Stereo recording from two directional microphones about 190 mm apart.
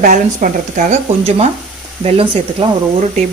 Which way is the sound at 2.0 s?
30° right (ahead or behind).